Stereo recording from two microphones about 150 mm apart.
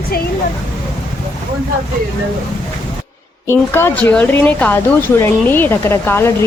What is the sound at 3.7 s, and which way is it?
A woman's voice, 15° left (ahead or behind).